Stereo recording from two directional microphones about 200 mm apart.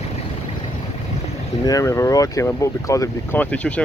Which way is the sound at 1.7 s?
15° left (ahead or behind).